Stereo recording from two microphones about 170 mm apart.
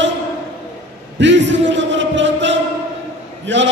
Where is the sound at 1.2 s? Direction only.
90° right.